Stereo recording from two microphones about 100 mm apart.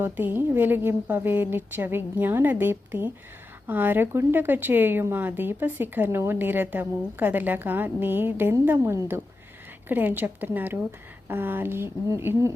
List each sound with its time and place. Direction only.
0.0 s speech: 20° right (ahead or behind)